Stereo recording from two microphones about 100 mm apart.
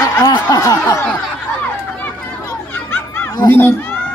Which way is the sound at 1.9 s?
20° left (ahead or behind).